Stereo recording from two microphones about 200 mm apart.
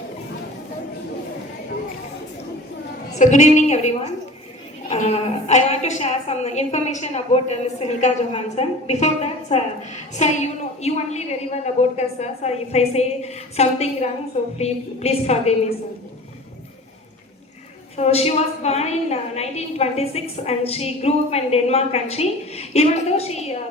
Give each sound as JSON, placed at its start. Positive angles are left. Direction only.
{"t": 3.2, "sound": "a woman's voice", "side_deg": 35}
{"t": 17.9, "sound": "a woman's voice", "side_deg": 30}